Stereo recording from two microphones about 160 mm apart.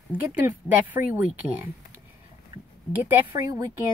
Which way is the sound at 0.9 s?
15° right (ahead or behind).